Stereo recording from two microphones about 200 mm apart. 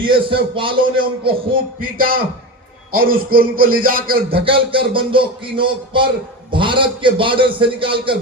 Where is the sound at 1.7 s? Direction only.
45° right (ahead or behind).